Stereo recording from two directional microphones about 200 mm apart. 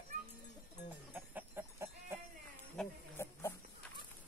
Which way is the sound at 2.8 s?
10° left (ahead or behind).